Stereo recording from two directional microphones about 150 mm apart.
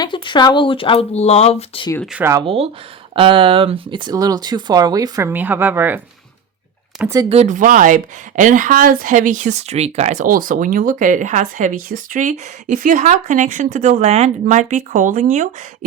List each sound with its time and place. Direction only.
0.0 s speech: 30° left (ahead or behind)
2.1 s speech: 15° right (ahead or behind)
3.2 s speech: 35° right (ahead or behind); by 6.0 s 10° right (ahead or behind)
7.3 s speech: 50° right (ahead or behind)